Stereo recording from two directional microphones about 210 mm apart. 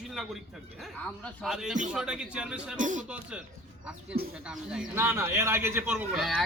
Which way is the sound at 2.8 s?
35° right (ahead or behind).